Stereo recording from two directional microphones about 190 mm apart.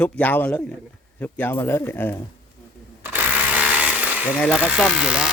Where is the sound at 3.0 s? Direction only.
5° right (ahead or behind).